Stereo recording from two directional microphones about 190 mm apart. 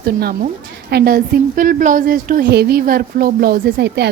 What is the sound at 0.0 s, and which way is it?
A woman's voice, 55° right (ahead or behind).